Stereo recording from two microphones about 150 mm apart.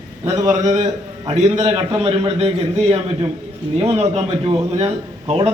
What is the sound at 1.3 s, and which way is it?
Speech, 50° right (ahead or behind).